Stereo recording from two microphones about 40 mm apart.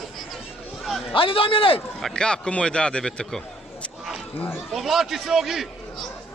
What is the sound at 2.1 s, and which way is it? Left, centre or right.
Speech, left.